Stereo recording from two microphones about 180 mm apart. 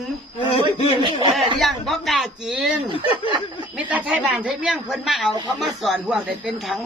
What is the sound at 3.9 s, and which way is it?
A woman's voice, 5° right (ahead or behind).